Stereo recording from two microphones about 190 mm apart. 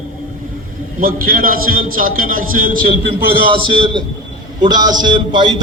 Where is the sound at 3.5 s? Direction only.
25° right (ahead or behind).